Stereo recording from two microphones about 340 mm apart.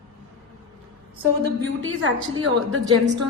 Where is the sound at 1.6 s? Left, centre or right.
Right.